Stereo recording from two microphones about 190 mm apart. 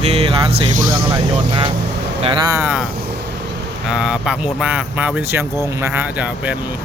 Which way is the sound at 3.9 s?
5° right (ahead or behind).